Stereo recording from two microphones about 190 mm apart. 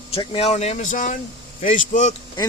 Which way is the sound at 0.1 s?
30° left (ahead or behind).